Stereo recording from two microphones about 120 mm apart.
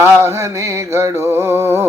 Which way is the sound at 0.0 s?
20° right (ahead or behind).